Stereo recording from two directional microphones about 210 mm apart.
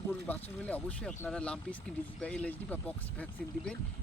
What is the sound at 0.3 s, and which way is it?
Speech, 5° left (ahead or behind).